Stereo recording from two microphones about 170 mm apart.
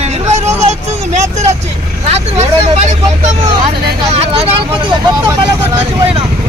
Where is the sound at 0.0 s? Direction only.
40° right (ahead or behind).